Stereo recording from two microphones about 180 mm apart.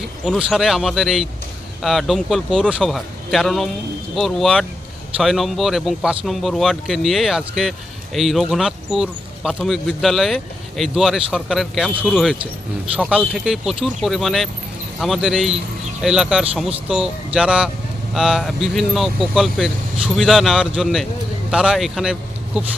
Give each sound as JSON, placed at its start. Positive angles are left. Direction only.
{"t": 0.3, "sound": "speech", "side_deg": -5}